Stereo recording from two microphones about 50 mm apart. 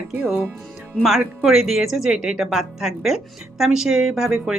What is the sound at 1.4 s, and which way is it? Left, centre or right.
A woman's voice, centre.